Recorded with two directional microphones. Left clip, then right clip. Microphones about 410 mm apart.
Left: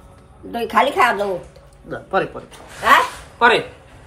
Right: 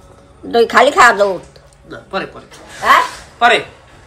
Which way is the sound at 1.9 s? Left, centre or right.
Centre.